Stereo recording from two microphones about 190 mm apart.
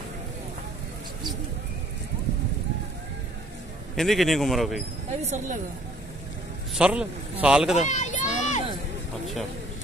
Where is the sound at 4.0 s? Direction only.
Centre (ahead or behind).